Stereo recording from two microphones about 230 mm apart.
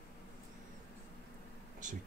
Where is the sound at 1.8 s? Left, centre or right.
Right.